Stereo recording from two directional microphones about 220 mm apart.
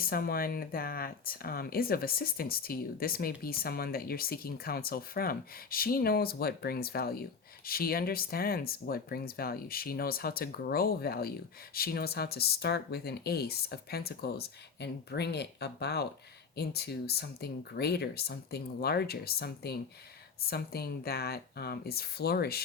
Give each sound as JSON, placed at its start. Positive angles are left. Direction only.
{"t": 0.0, "sound": "speech", "side_deg": 40}